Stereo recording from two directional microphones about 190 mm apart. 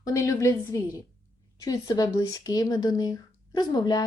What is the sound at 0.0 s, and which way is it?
A woman's voice, 15° left (ahead or behind).